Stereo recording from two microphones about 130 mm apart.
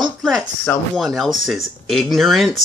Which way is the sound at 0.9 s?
Centre (ahead or behind).